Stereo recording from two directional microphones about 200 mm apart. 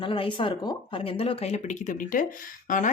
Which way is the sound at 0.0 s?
25° left (ahead or behind).